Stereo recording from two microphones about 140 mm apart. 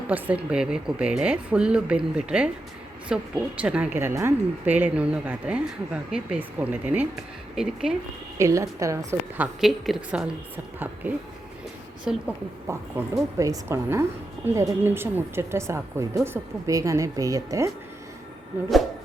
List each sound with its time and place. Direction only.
0.1 s a woman's voice: 10° right (ahead or behind)
8.4 s a woman's voice: 20° right (ahead or behind)
9.4 s a woman's voice: centre (ahead or behind)
12.1 s a woman's voice: 5° right (ahead or behind); by 17.7 s 25° right (ahead or behind)